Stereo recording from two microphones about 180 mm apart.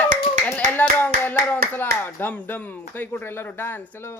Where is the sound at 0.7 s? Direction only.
10° left (ahead or behind).